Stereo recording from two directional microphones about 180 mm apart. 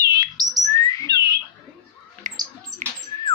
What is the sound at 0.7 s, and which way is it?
Bird, 20° left (ahead or behind).